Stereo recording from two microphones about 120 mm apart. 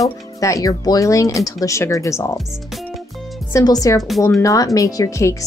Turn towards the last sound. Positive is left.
turn(degrees=30)  # may be behind; listen again after turning